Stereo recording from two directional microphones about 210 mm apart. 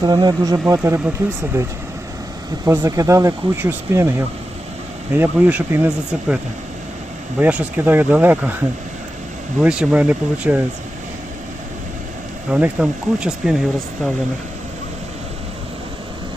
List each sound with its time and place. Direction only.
0.0 s speech: 20° right (ahead or behind)
5.1 s speech: 10° right (ahead or behind)
9.6 s speech: 5° right (ahead or behind)
12.5 s speech: 5° right (ahead or behind)